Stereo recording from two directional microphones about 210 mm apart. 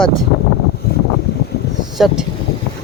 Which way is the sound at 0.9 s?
50° left (ahead or behind).